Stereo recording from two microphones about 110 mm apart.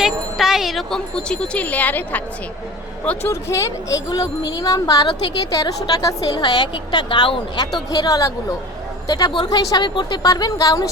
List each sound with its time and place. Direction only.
0.0 s speech: 5° right (ahead or behind)
3.5 s a woman's voice: 30° left (ahead or behind)
9.3 s speech: 50° left (ahead or behind)
9.6 s a woman's voice: 35° left (ahead or behind)